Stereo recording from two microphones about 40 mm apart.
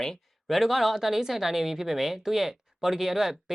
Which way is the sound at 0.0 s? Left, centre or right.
Centre.